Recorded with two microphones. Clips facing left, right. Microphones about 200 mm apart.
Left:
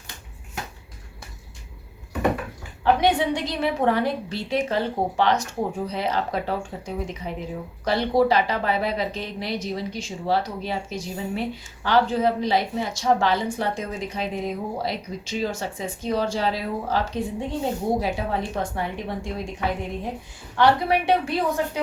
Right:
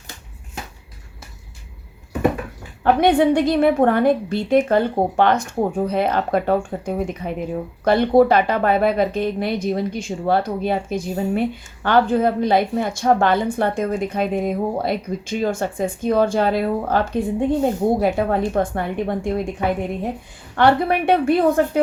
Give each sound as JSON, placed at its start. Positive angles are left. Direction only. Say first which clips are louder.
{"t": 2.8, "sound": "speech", "louder": "right 5 dB", "side_deg": -55}
{"t": 20.6, "sound": "a woman's voice", "louder": "right 3 dB", "side_deg": -55}